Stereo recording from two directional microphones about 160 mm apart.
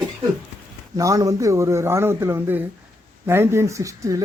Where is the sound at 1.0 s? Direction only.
20° right (ahead or behind).